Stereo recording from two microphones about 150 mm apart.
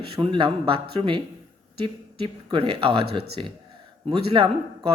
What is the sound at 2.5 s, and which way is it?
Speech, 35° right (ahead or behind).